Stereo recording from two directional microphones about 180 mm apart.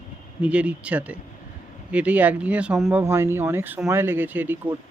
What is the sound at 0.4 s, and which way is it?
A man's voice, 5° right (ahead or behind).